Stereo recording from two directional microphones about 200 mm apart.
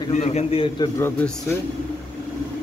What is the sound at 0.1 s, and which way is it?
Speech, 35° left (ahead or behind).